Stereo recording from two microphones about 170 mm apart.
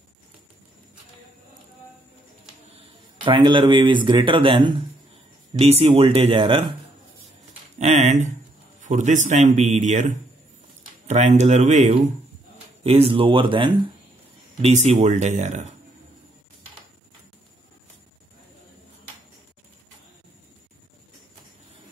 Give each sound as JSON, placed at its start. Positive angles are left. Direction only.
{"t": 3.3, "sound": "speech", "side_deg": -30}
{"t": 7.8, "sound": "speech", "side_deg": -40}
{"t": 14.6, "sound": "speech", "side_deg": -45}